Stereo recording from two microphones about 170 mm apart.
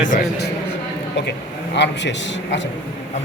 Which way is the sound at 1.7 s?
90° left.